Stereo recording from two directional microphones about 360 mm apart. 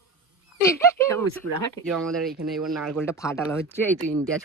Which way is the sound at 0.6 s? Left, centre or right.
Centre.